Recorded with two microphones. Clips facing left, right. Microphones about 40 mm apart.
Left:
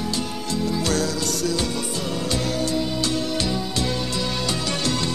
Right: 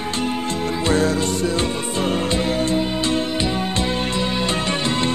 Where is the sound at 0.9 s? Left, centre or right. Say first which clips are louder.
Right 5 dB; right.